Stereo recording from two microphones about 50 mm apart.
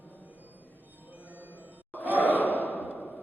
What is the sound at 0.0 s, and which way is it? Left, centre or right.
Music, left.